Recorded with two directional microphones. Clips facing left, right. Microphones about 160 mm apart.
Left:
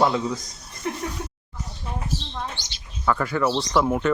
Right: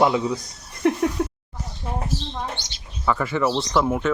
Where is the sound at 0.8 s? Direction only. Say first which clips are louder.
Right 9 dB; 70° right (ahead or behind).